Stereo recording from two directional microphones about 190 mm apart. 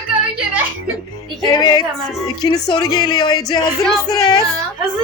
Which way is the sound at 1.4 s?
20° left (ahead or behind).